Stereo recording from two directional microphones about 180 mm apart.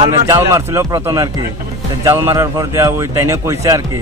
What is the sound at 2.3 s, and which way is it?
Speech, 15° right (ahead or behind).